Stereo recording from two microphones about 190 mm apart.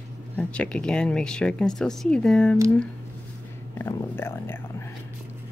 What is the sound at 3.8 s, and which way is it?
Speech, 10° left (ahead or behind).